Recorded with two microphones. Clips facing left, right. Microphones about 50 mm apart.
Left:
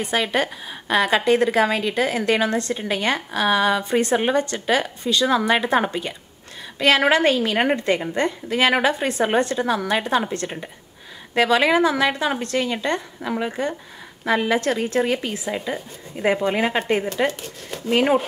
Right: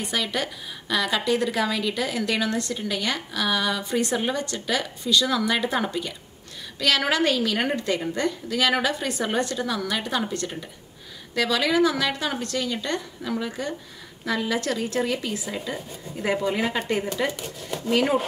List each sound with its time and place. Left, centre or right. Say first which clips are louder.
0.0 s a woman's voice: left 5 dB; left